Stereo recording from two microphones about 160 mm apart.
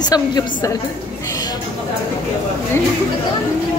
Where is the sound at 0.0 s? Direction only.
25° left (ahead or behind).